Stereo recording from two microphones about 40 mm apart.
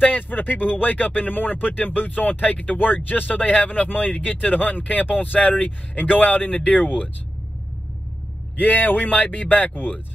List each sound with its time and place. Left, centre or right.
0.0 s speech: left
8.5 s speech: left